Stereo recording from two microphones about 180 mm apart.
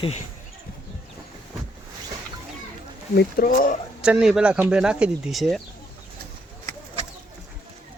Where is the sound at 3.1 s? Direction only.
60° left (ahead or behind).